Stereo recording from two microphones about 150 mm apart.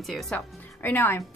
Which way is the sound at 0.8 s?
15° left (ahead or behind).